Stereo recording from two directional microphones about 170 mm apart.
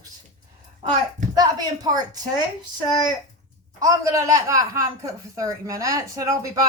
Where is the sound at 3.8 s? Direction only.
20° right (ahead or behind).